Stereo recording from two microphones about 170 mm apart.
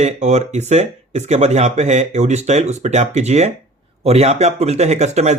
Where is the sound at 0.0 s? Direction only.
45° right (ahead or behind).